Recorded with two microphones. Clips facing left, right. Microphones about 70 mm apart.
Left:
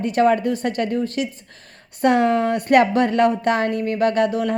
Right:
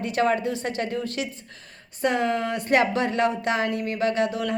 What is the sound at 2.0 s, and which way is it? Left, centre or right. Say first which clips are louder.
A woman's voice: left 7 dB; left.